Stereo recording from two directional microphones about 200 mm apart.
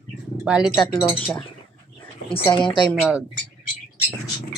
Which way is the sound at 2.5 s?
25° left (ahead or behind).